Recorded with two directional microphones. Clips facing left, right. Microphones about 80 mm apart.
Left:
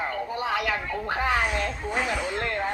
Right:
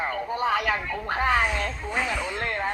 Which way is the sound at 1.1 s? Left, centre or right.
Right.